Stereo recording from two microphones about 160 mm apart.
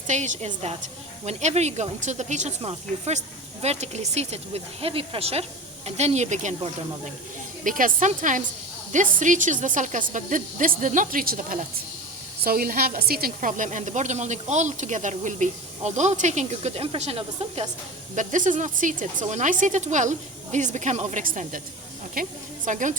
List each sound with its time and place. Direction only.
0.1 s speech: 45° right (ahead or behind)
7.6 s speech: 55° right (ahead or behind); by 17.7 s 40° right (ahead or behind)
18.1 s speech: 50° right (ahead or behind)